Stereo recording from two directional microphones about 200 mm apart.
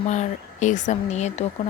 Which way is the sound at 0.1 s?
35° left (ahead or behind).